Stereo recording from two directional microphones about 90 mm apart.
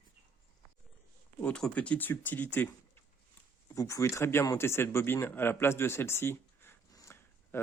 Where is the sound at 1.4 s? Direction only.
15° left (ahead or behind).